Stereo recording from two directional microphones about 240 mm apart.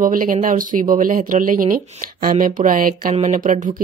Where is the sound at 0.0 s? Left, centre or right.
Right.